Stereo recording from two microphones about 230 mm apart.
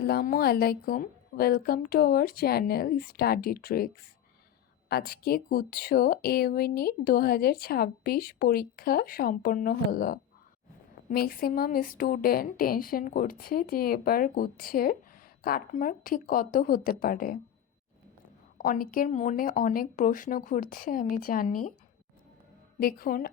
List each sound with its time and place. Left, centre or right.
0.0 s speech: left
18.5 s speech: left
22.8 s speech: left